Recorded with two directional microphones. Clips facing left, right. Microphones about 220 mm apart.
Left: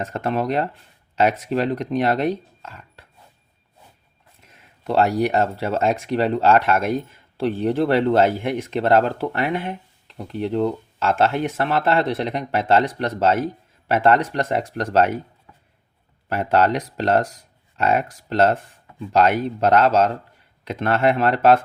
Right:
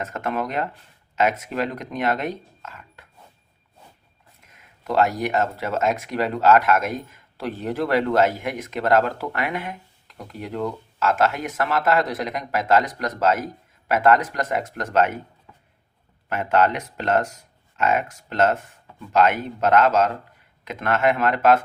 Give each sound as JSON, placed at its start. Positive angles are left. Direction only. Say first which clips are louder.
{"t": 0.0, "sound": "speech", "louder": "left 3 dB", "side_deg": 30}
{"t": 4.4, "sound": "speech", "louder": "left 2 dB", "side_deg": 30}
{"t": 16.3, "sound": "speech", "louder": "left 2 dB", "side_deg": 35}